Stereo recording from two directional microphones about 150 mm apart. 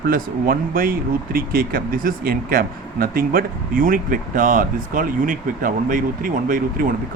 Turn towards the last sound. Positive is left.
turn(degrees=-65)  # may be behind; listen again after turning